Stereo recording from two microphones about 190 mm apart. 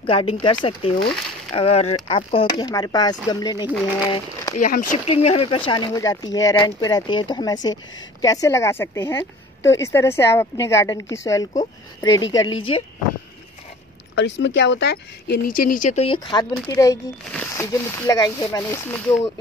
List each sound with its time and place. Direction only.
0.0 s speech: 30° left (ahead or behind)
4.6 s speech: 45° left (ahead or behind); by 12.5 s 20° left (ahead or behind)
14.1 s speech: 70° left (ahead or behind); by 19.1 s 15° left (ahead or behind)